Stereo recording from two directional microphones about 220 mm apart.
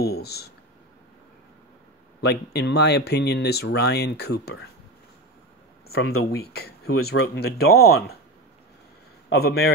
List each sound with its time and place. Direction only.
0.0 s speech: 45° left (ahead or behind)
2.2 s speech: 50° left (ahead or behind)
6.3 s speech: 45° left (ahead or behind)
9.3 s speech: 45° left (ahead or behind)